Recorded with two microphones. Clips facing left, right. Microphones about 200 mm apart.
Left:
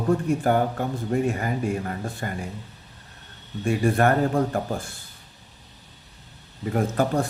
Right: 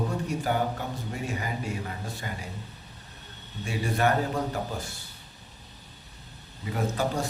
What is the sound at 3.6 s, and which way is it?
Speech, 50° left (ahead or behind).